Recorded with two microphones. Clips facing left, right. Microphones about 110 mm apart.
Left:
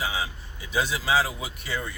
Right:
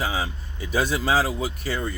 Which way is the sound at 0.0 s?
45° right (ahead or behind).